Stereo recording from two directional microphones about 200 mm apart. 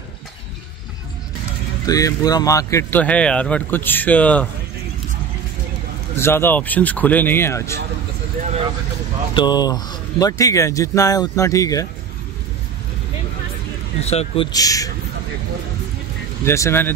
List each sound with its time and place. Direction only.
1.9 s speech: 15° left (ahead or behind)
6.1 s speech: 10° left (ahead or behind)
9.3 s speech: 20° left (ahead or behind)
14.0 s a man's voice: 30° left (ahead or behind)
16.4 s speech: 15° left (ahead or behind)